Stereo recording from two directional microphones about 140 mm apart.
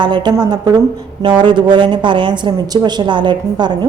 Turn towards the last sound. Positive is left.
turn(degrees=-30)  # may be behind; listen again after turning